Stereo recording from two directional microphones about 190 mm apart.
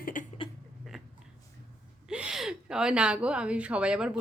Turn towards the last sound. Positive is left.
turn(degrees=-5)  # may be behind; listen again after turning